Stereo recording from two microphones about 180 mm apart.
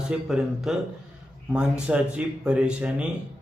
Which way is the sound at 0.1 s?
5° right (ahead or behind).